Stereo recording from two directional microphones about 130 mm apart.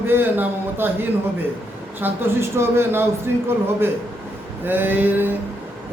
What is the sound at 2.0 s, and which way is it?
Speech, 15° right (ahead or behind).